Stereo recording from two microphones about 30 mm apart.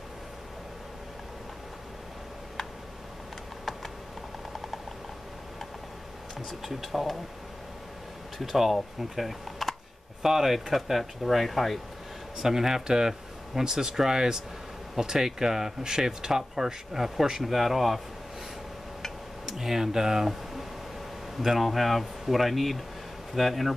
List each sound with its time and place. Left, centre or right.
6.6 s speech: centre
8.4 s speech: centre
12.4 s speech: centre
19.4 s speech: centre
21.4 s speech: centre